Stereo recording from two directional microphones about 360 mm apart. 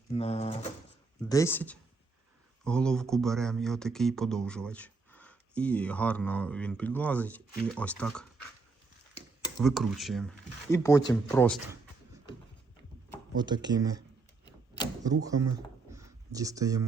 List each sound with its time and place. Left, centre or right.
0.1 s speech: centre
9.6 s speech: centre
13.3 s speech: centre
15.0 s speech: centre